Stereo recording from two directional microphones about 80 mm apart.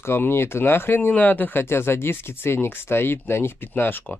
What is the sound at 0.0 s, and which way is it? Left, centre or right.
Speech, left.